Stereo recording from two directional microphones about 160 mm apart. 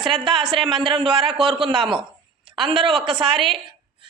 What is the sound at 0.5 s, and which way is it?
Speech, 30° right (ahead or behind).